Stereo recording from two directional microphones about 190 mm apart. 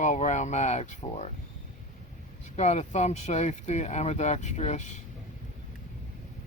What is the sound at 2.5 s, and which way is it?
Speech, 35° left (ahead or behind).